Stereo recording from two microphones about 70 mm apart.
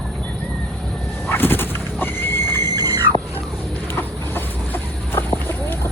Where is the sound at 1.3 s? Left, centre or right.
Left.